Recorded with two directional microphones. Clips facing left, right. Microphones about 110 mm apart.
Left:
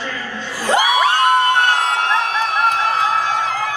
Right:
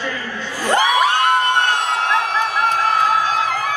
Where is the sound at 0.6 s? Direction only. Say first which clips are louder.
Even; 15° left (ahead or behind).